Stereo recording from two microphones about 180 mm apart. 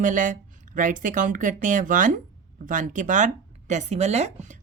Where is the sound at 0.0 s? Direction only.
45° right (ahead or behind).